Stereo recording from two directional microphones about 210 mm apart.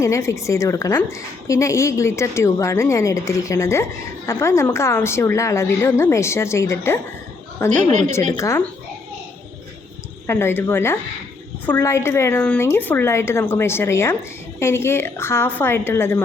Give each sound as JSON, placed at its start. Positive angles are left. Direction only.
{"t": 0.0, "sound": "a woman's voice", "side_deg": 15}
{"t": 7.7, "sound": "a woman's voice", "side_deg": -35}
{"t": 8.3, "sound": "a woman's voice", "side_deg": 15}
{"t": 10.2, "sound": "a woman's voice", "side_deg": 10}